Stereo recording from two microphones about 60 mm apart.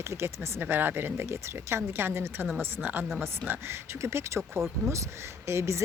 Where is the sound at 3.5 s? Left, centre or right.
Right.